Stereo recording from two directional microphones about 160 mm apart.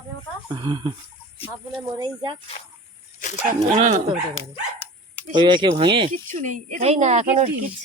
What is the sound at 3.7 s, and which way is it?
Speech, 45° right (ahead or behind).